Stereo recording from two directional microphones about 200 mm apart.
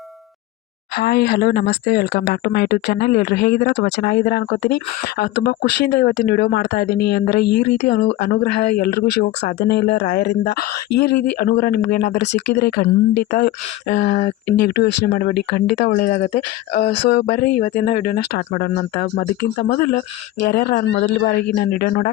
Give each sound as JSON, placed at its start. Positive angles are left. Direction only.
{"t": 0.9, "sound": "speech", "side_deg": 55}
{"t": 15.9, "sound": "speech", "side_deg": 40}
{"t": 16.9, "sound": "speech", "side_deg": 60}
{"t": 17.6, "sound": "speech", "side_deg": 40}